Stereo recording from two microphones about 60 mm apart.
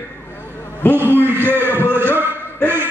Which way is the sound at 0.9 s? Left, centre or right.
Right.